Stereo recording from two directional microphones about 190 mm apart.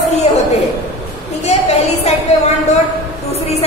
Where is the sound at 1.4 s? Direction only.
35° left (ahead or behind).